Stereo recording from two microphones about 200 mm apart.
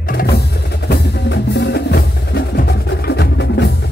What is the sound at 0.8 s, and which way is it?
Music, 60° left (ahead or behind).